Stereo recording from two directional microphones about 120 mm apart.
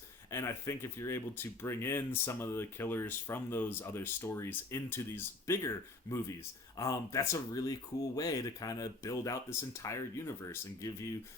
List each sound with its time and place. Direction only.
0.3 s speech: 25° left (ahead or behind)